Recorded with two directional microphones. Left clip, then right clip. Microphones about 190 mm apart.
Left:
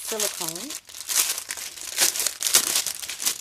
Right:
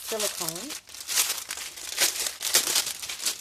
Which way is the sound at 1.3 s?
35° left (ahead or behind).